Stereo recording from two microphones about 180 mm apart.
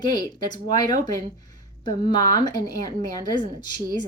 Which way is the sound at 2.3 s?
20° left (ahead or behind).